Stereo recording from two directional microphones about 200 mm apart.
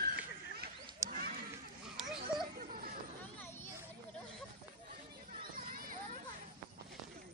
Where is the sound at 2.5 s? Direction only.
45° right (ahead or behind).